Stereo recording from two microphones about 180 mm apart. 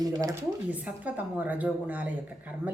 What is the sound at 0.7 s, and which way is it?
A woman's voice, 10° right (ahead or behind).